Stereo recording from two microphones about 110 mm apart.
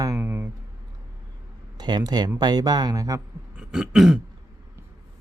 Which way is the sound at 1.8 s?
40° right (ahead or behind).